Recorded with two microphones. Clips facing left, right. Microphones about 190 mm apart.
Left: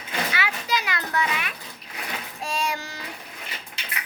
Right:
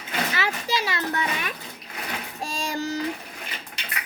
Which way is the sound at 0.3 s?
35° right (ahead or behind).